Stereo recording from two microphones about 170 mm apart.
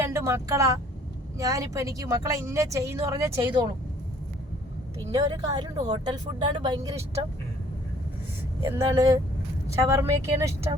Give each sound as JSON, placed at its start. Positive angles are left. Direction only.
{"t": 0.0, "sound": "speech", "side_deg": -15}
{"t": 5.1, "sound": "speech", "side_deg": -25}
{"t": 8.6, "sound": "speech", "side_deg": -20}